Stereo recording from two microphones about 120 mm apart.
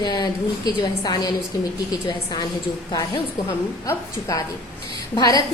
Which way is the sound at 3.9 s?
25° left (ahead or behind).